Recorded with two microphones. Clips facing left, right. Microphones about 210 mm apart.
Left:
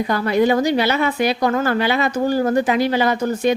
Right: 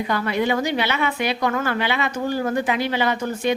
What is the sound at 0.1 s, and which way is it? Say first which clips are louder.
A woman's voice: left 5 dB; 40° left (ahead or behind).